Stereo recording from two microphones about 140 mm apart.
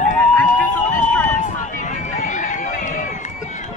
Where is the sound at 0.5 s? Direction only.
65° left (ahead or behind).